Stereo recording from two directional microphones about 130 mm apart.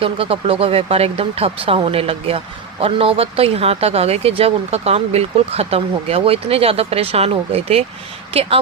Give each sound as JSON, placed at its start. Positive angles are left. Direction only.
{"t": 0.0, "sound": "speech", "side_deg": -45}